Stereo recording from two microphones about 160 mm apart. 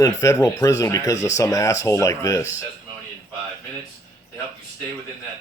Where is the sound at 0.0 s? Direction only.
20° left (ahead or behind).